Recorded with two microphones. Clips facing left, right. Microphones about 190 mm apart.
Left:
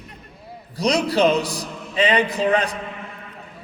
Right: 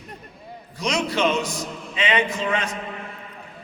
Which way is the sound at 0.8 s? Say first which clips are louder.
Left 5 dB; 35° left (ahead or behind).